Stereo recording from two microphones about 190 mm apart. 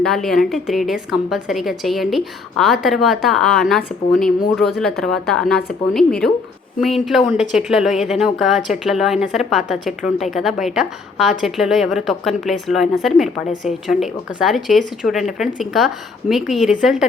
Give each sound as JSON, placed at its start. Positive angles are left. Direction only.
{"t": 0.0, "sound": "a woman's voice", "side_deg": 5}